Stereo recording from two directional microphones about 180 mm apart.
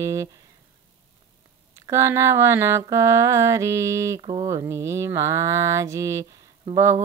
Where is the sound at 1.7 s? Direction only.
15° right (ahead or behind).